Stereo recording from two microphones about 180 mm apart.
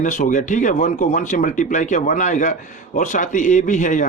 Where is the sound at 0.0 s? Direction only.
45° left (ahead or behind).